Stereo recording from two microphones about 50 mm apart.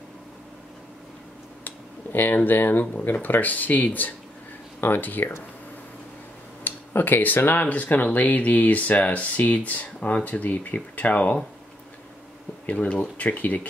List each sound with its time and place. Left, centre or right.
2.1 s speech: left
6.6 s speech: left
12.6 s speech: left